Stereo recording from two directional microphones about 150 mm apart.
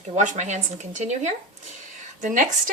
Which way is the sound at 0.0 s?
55° right (ahead or behind).